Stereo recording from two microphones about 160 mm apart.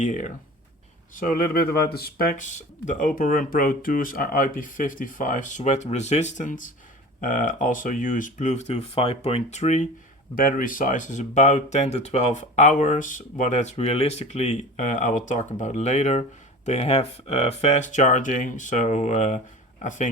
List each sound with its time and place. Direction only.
0.0 s speech: 50° left (ahead or behind)
10.3 s speech: 55° left (ahead or behind)